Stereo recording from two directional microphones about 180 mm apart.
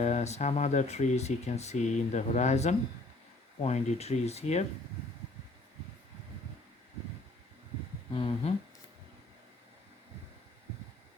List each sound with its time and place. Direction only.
0.0 s speech: 40° left (ahead or behind)
8.1 s speech: 30° left (ahead or behind)